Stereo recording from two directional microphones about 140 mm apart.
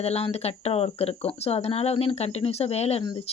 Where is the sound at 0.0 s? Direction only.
50° left (ahead or behind).